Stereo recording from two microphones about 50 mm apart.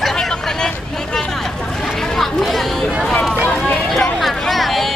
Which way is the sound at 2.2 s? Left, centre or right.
Centre.